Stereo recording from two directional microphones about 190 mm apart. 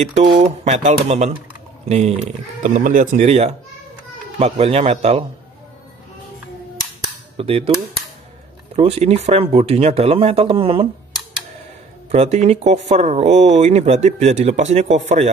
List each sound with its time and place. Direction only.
0.1 s speech: 35° right (ahead or behind)
7.3 s cap gun: 30° right (ahead or behind)
8.7 s speech: 35° right (ahead or behind)
12.1 s speech: 35° right (ahead or behind)